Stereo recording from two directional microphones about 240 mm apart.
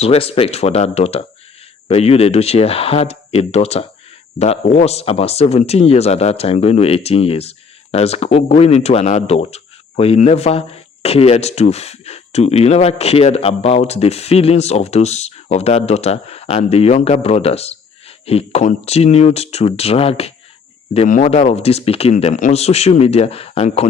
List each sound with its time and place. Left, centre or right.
0.0 s speech: left